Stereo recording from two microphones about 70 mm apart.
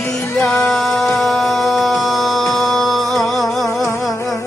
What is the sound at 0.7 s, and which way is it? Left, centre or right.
Music, centre.